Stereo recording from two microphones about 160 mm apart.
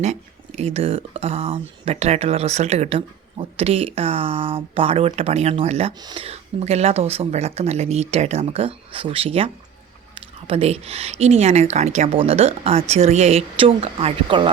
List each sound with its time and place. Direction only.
0.0 s speech: 45° right (ahead or behind)
6.0 s speech: 25° right (ahead or behind)
6.2 s speech: 40° right (ahead or behind)